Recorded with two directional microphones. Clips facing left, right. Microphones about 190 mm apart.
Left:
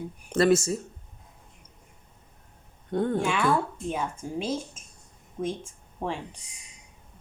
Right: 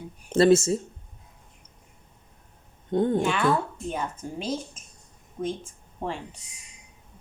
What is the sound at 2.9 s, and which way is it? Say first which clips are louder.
Speech: right 3 dB; 20° right (ahead or behind).